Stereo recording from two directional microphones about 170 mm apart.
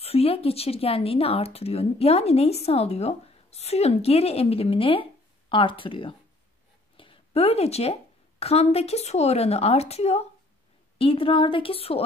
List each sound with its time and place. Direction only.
0.0 s a woman's voice: 35° left (ahead or behind)